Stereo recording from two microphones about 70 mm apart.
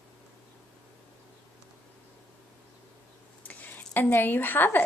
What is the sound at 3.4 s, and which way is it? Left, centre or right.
Speech, left.